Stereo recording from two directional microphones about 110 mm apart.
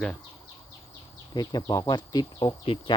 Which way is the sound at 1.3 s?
40° left (ahead or behind).